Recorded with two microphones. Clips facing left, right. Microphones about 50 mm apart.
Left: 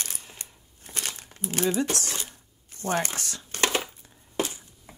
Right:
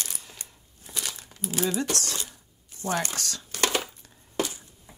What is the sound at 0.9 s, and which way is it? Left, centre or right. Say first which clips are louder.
Crumpling: left 1 dB; left.